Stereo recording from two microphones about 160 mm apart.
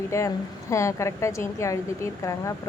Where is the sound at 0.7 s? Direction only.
20° left (ahead or behind).